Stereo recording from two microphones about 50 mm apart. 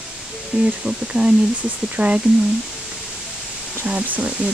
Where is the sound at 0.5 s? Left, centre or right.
Right.